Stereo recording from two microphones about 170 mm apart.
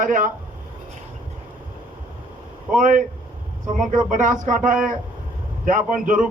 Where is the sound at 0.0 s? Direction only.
50° right (ahead or behind).